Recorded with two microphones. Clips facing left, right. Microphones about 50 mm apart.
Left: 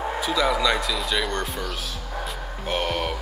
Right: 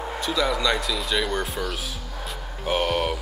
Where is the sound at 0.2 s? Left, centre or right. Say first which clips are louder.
Left 1 dB; centre.